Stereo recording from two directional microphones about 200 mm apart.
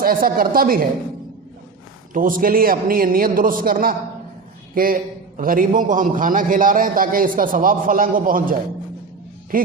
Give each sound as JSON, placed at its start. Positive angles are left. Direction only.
{"t": 0.0, "sound": "a man's voice", "side_deg": -45}
{"t": 2.1, "sound": "a man's voice", "side_deg": -45}